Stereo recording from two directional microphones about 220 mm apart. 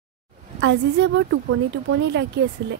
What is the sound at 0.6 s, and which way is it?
A woman's voice, 55° right (ahead or behind).